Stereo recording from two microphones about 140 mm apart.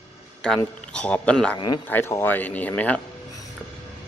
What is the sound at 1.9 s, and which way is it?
Speech, 15° left (ahead or behind).